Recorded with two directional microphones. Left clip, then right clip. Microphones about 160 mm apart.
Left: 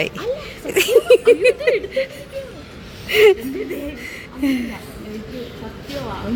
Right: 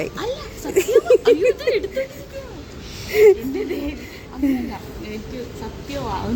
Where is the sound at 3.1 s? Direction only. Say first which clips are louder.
Left 1 dB; 10° right (ahead or behind).